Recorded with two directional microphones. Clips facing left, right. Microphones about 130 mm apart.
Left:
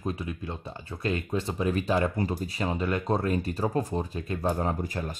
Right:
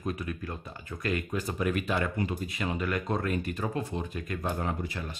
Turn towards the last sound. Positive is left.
turn(degrees=40)  # may be behind; listen again after turning